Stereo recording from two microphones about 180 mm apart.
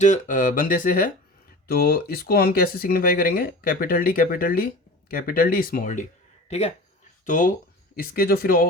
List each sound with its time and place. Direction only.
0.0 s speech: 45° left (ahead or behind)
7.3 s speech: 45° left (ahead or behind)